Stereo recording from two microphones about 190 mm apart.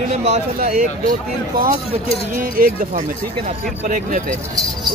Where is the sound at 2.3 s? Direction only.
45° right (ahead or behind).